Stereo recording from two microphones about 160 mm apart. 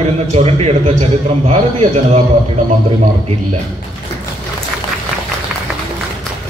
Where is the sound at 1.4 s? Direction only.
50° right (ahead or behind).